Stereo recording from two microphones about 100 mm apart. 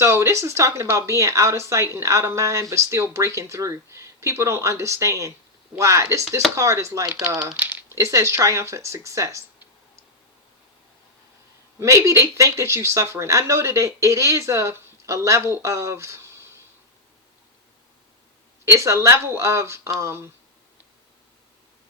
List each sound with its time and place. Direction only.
0.0 s speech: 25° right (ahead or behind)
7.5 s a sound: 15° right (ahead or behind)
7.9 s speech: 30° right (ahead or behind)
11.8 s speech: 30° right (ahead or behind)
18.8 s speech: 30° right (ahead or behind)